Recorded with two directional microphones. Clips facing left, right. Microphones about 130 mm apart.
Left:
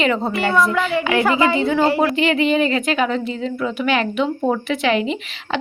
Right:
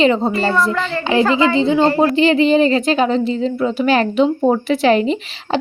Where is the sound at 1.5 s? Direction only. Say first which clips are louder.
Right 3 dB; 20° right (ahead or behind).